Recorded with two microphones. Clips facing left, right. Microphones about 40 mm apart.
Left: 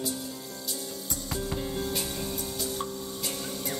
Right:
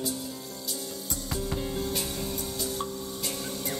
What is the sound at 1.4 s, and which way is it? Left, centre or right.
Music, centre.